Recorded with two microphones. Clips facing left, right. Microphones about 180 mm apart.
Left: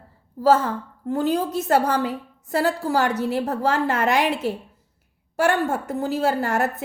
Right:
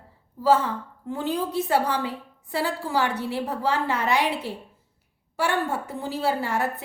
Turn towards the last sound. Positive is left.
turn(degrees=45)  # may be behind; listen again after turning